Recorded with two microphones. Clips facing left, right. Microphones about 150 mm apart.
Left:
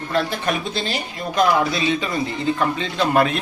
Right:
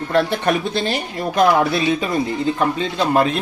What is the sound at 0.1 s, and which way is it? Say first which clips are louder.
Speech: right 4 dB; 60° right (ahead or behind).